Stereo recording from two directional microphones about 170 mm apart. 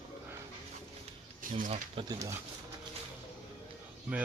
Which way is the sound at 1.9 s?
25° right (ahead or behind).